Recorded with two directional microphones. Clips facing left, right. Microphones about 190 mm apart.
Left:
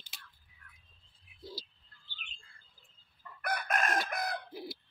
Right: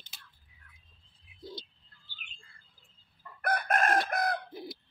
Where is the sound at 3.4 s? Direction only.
55° right (ahead or behind).